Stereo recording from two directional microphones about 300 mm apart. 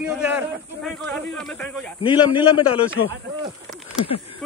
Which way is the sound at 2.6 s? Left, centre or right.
Left.